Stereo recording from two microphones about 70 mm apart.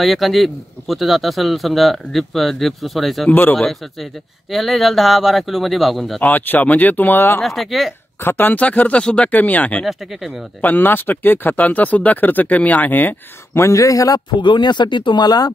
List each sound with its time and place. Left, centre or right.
0.0 s a man's voice: centre
6.2 s speech: left
7.4 s a man's voice: centre
8.2 s speech: left
9.8 s a man's voice: centre
10.6 s speech: left
13.6 s speech: left
14.4 s speech: left